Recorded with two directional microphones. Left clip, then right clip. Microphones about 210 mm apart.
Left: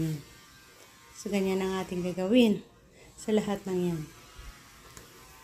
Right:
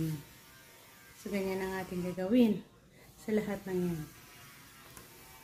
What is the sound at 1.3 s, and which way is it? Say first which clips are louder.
A woman's voice: left 6 dB; 30° left (ahead or behind).